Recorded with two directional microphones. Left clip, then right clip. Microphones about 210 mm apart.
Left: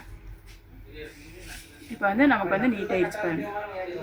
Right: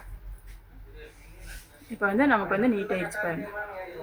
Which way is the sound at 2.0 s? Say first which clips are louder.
Left 1 dB; 40° right (ahead or behind).